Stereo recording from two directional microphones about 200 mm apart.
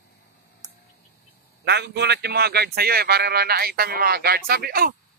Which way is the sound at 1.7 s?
55° right (ahead or behind).